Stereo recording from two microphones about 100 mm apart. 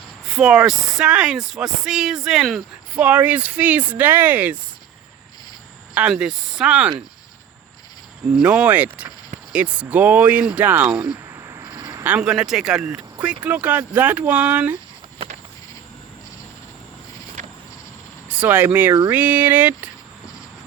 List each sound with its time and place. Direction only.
0.3 s speech: 10° right (ahead or behind)
2.9 s speech: 15° right (ahead or behind)
5.9 s speech: 10° right (ahead or behind)
8.4 s speech: 15° right (ahead or behind)
11.3 s a sound: 30° right (ahead or behind)
11.6 s a sound: 45° right (ahead or behind)
12.0 s speech: 10° right (ahead or behind)
18.3 s speech: 15° right (ahead or behind)